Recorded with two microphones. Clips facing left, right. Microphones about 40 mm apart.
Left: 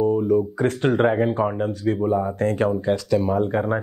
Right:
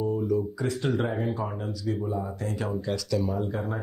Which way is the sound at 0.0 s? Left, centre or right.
Left.